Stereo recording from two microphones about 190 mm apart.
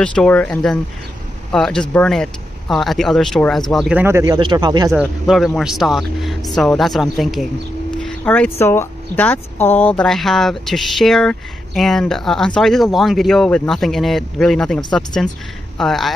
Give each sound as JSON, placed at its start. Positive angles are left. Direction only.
{"t": 0.0, "sound": "speech", "side_deg": 5}
{"t": 4.0, "sound": "speech", "side_deg": -15}
{"t": 5.2, "sound": "speech", "side_deg": 0}